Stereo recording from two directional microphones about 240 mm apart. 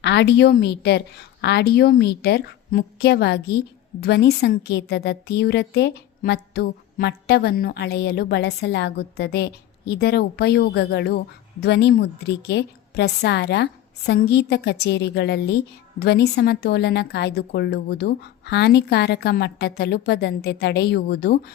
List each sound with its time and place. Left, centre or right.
0.0 s a woman's voice: left